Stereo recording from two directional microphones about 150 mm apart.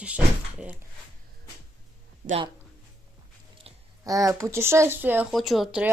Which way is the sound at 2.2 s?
85° right.